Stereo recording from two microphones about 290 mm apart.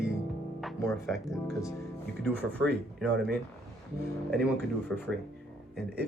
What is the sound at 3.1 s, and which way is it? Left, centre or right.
Speech, right.